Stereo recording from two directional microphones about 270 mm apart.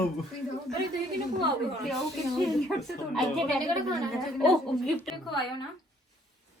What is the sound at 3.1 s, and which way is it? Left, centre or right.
A woman's voice, centre.